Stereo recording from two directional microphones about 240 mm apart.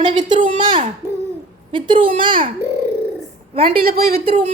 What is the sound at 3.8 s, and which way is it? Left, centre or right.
Speech, right.